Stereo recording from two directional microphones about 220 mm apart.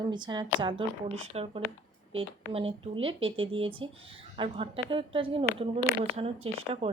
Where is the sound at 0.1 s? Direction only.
20° right (ahead or behind).